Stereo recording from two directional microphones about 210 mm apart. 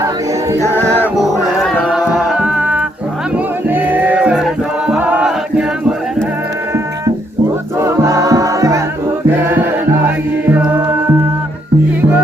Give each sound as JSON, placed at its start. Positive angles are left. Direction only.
{"t": 0.5, "sound": "choir", "side_deg": -15}
{"t": 3.7, "sound": "music", "side_deg": -10}
{"t": 4.9, "sound": "chant", "side_deg": -5}
{"t": 7.8, "sound": "music", "side_deg": -15}